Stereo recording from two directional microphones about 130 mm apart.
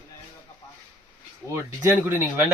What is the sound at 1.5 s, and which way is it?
Speech, 20° right (ahead or behind).